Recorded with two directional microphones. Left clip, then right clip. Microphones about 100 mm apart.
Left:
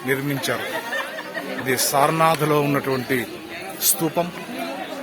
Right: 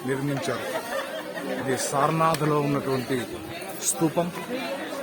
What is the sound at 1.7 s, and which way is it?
A man's voice, 30° left (ahead or behind).